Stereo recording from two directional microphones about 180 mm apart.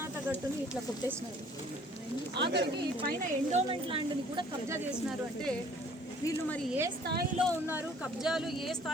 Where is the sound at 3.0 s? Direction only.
50° right (ahead or behind).